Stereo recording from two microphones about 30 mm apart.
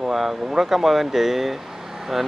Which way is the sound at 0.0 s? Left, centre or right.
Centre.